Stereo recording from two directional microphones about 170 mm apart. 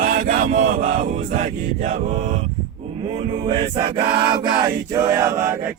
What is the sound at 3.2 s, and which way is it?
Chant, 30° right (ahead or behind).